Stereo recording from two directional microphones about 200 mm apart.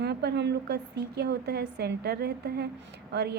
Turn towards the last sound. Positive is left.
turn(degrees=-55)  # may be behind; listen again after turning